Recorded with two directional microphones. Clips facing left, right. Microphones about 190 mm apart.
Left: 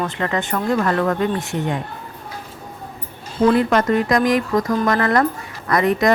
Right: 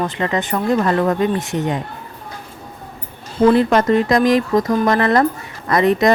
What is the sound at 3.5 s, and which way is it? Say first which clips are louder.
Speech: right 3 dB; 30° right (ahead or behind).